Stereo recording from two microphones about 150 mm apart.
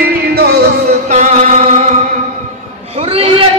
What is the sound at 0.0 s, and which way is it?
Music, 90° right.